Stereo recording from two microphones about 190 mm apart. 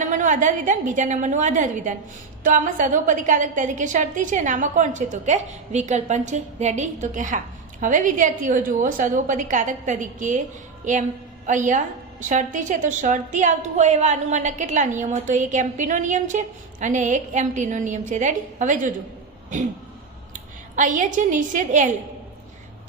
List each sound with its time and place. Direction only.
0.0 s a woman's voice: 40° right (ahead or behind)
20.7 s a woman's voice: 40° right (ahead or behind)